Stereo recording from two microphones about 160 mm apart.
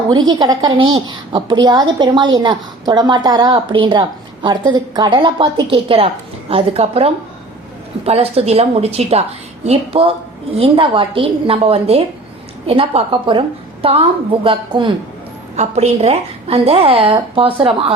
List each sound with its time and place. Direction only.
0.1 s a woman's voice: 25° right (ahead or behind)
15.5 s a woman's voice: 45° right (ahead or behind)